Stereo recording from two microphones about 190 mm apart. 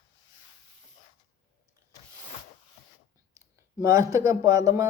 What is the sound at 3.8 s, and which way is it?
Speech, 15° right (ahead or behind).